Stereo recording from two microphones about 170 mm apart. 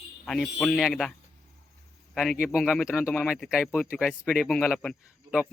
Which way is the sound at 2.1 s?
Centre (ahead or behind).